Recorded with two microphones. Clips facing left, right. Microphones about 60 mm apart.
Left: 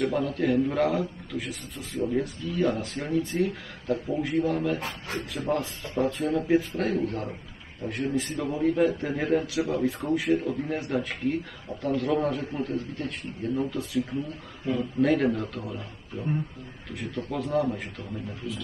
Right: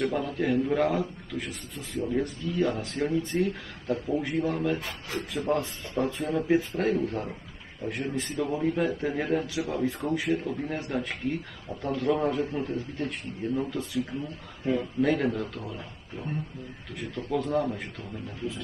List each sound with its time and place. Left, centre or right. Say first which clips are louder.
0.0 s a man's voice: left 2 dB; centre
4.7 s speech: left 1 dB; left
5.5 s a man's voice: even; centre
14.7 s speech: right 1 dB; right
15.0 s a man's voice: left 5 dB; centre